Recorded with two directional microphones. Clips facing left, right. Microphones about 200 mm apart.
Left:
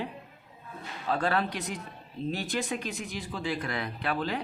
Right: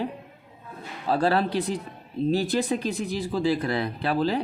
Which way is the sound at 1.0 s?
35° right (ahead or behind).